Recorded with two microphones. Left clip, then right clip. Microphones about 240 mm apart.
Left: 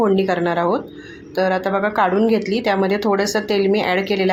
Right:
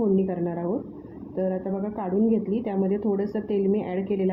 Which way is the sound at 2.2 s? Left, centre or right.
Left.